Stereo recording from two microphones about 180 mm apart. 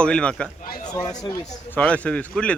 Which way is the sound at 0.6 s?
55° left (ahead or behind).